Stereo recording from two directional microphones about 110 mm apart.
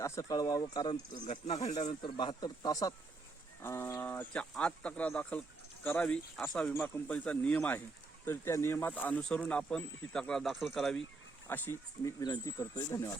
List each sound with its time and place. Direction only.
0.0 s speech: 30° left (ahead or behind)
3.6 s speech: 20° left (ahead or behind)
8.2 s speech: 25° left (ahead or behind); by 11.0 s centre (ahead or behind)
11.4 s speech: 20° left (ahead or behind)
12.2 s speech: 40° left (ahead or behind)